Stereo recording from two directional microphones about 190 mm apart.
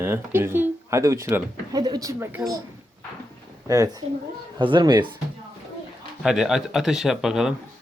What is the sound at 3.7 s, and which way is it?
Speech, 20° right (ahead or behind).